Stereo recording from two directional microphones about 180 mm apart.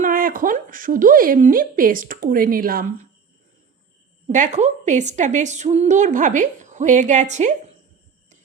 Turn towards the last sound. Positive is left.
turn(degrees=-40)  # may be behind; listen again after turning